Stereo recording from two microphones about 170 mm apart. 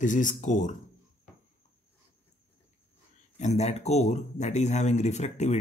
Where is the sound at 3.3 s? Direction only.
40° left (ahead or behind).